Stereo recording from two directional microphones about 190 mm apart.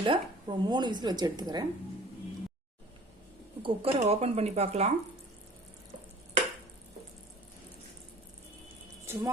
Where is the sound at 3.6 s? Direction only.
30° right (ahead or behind).